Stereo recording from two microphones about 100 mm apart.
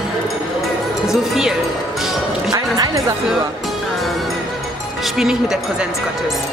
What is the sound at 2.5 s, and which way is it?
Speech, 35° right (ahead or behind).